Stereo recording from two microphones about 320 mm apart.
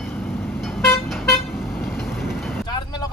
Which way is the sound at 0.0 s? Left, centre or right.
Centre.